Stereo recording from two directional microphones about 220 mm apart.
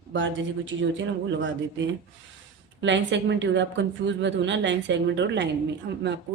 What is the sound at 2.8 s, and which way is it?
Speech, 55° right (ahead or behind).